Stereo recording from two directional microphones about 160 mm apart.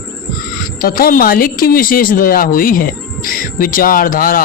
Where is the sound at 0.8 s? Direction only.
65° left (ahead or behind).